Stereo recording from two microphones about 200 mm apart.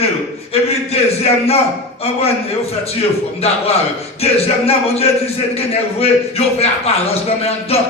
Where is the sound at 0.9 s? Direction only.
30° left (ahead or behind).